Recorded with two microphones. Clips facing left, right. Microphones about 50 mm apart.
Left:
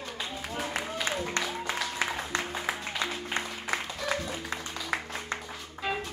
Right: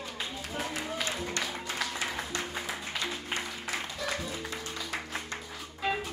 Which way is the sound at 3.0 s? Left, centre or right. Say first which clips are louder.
Left 2 dB; left.